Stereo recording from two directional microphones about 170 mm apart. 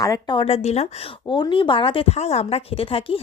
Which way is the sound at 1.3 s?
25° left (ahead or behind).